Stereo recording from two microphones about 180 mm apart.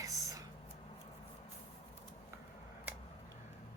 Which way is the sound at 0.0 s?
20° right (ahead or behind).